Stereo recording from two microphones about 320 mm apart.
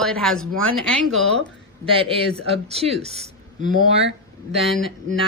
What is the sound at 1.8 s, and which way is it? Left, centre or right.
Speech, centre.